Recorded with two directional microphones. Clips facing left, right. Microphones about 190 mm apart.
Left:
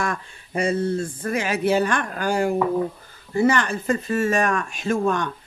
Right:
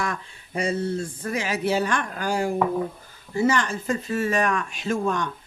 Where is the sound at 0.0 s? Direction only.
50° left (ahead or behind).